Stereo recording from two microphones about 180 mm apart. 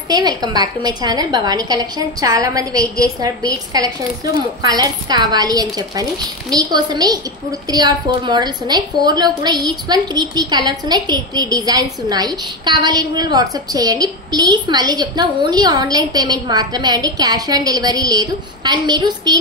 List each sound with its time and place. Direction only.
0.1 s a woman's voice: 20° right (ahead or behind)